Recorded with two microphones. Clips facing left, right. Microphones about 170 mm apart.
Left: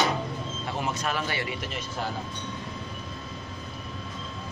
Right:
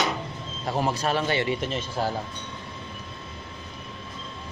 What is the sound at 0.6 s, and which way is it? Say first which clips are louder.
Speech: right 6 dB; 35° right (ahead or behind).